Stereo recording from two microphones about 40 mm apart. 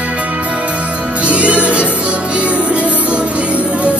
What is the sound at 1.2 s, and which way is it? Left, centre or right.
Music, right.